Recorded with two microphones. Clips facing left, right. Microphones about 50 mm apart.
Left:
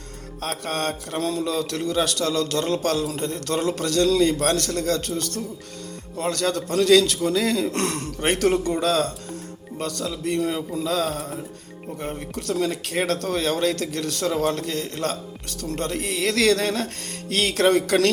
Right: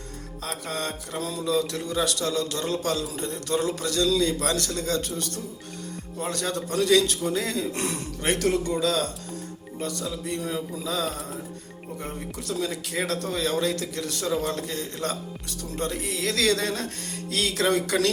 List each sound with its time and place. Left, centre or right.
0.4 s music: left
1.2 s a man's voice: left
8.2 s music: left
9.7 s music: left
10.8 s a man's voice: left
15.7 s music: left